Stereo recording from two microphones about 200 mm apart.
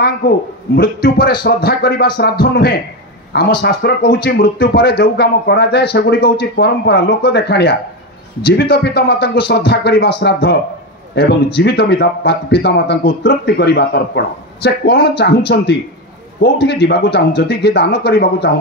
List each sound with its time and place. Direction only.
0.7 s a man's voice: 50° left (ahead or behind)